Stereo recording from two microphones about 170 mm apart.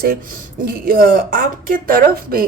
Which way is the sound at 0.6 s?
60° right (ahead or behind).